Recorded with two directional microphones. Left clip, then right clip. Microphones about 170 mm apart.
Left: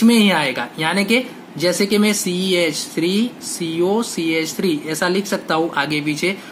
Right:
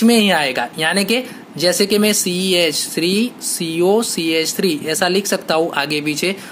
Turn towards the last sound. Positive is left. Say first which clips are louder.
# right 1 dB
turn(degrees=-50)  # may be behind; listen again after turning